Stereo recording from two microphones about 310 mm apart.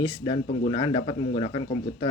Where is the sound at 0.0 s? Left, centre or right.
Centre.